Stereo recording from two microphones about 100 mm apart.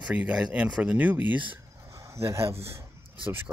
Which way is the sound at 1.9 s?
30° right (ahead or behind).